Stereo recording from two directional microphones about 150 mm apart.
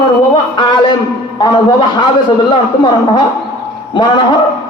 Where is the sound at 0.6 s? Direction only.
30° left (ahead or behind).